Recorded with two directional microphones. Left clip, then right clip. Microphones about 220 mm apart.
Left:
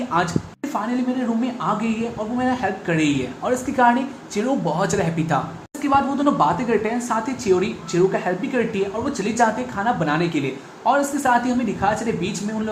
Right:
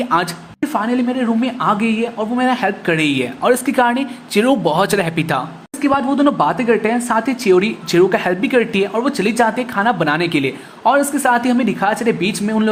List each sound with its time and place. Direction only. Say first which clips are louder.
0.7 s a woman's voice: right 5 dB; 40° right (ahead or behind)